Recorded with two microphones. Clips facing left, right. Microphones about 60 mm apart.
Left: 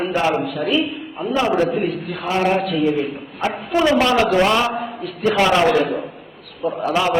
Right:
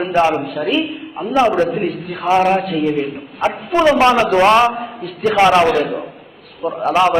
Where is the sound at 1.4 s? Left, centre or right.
Right.